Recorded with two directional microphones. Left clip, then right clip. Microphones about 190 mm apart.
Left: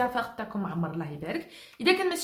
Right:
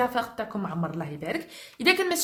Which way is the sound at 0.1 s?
35° right (ahead or behind).